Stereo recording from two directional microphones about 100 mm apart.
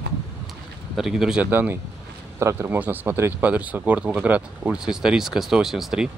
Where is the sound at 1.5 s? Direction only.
20° right (ahead or behind).